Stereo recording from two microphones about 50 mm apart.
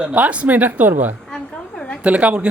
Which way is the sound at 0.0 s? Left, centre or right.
Right.